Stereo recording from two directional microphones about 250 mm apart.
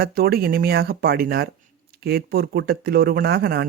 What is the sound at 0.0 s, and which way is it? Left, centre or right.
Speech, right.